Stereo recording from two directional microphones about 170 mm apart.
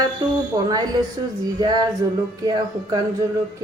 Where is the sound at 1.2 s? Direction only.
25° right (ahead or behind).